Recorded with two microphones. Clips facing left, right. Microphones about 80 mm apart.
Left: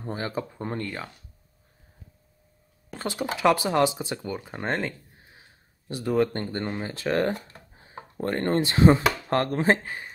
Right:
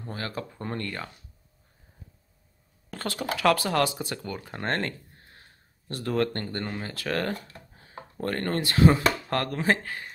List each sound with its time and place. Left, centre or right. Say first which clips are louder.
0.0 s speech: left 4 dB; left
2.9 s speech: left 1 dB; centre